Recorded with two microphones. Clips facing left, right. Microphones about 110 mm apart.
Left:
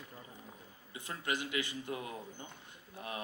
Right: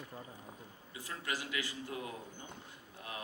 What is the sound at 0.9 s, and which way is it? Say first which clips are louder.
Speech: left 3 dB; 25° left (ahead or behind).